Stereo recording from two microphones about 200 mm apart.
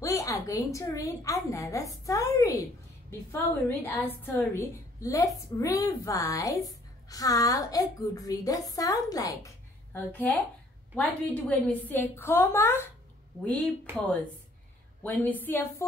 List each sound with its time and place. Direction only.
0.0 s a woman's voice: 15° left (ahead or behind)
11.0 s a woman's voice: 5° left (ahead or behind)
13.9 s a woman's voice: 5° left (ahead or behind)